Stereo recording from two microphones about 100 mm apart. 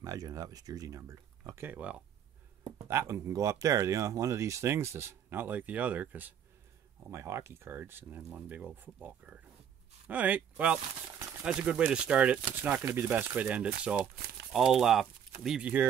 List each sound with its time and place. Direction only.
0.0 s speech: 35° right (ahead or behind); by 2.0 s 15° right (ahead or behind)
2.9 s speech: 25° right (ahead or behind)
7.1 s speech: 30° right (ahead or behind); by 15.7 s 5° right (ahead or behind)